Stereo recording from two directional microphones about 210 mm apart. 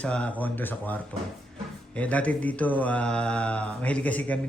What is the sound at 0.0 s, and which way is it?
Speech, 5° left (ahead or behind).